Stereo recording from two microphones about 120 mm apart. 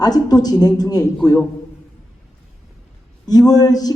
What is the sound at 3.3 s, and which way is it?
Speech, 30° left (ahead or behind).